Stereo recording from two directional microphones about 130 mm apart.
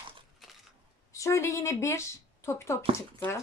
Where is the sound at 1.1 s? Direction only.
25° left (ahead or behind).